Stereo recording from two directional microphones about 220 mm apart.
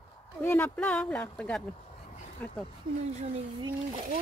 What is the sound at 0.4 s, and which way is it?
Speech, 10° left (ahead or behind).